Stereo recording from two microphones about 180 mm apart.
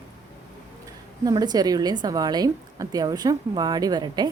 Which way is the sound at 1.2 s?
20° right (ahead or behind).